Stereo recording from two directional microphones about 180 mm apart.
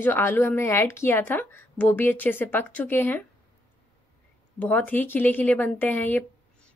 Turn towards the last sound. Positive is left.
turn(degrees=10)  # may be behind; listen again after turning